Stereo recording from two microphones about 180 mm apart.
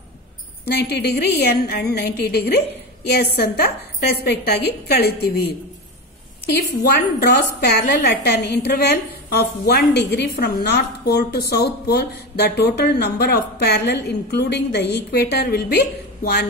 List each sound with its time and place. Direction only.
0.7 s a woman's voice: 65° left (ahead or behind)
6.5 s a woman's voice: 60° left (ahead or behind)